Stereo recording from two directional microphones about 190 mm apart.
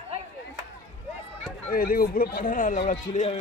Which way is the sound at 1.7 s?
50° left (ahead or behind).